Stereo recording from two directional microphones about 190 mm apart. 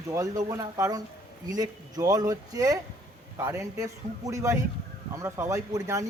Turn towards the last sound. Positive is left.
turn(degrees=-15)  # may be behind; listen again after turning